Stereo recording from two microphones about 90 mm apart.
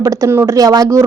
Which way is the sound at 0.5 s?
40° right (ahead or behind).